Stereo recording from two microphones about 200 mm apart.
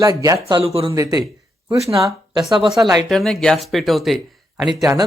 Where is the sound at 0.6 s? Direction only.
30° right (ahead or behind).